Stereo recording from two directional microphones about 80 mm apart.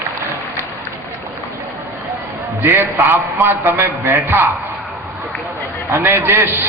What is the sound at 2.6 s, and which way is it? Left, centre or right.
A man's voice, right.